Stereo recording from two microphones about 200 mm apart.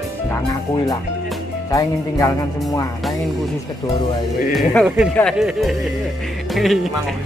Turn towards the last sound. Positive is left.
turn(degrees=0)  # may be behind; listen again after turning